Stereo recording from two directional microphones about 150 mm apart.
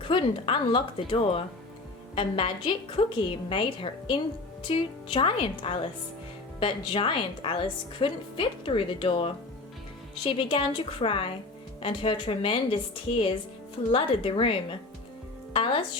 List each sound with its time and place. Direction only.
0.0 s a woman's voice: 35° left (ahead or behind)